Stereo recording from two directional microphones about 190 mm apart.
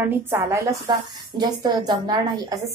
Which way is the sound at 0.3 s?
15° right (ahead or behind).